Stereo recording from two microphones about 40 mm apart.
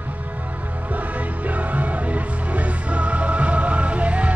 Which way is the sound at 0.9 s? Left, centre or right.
Right.